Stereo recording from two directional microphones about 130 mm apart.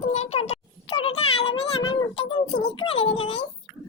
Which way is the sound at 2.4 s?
35° left (ahead or behind).